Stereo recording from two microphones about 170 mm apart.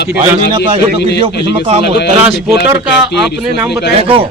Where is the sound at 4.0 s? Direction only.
35° right (ahead or behind).